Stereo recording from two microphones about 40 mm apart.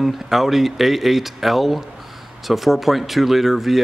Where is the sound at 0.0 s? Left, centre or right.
Centre.